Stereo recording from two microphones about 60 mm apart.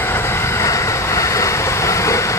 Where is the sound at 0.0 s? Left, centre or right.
Left.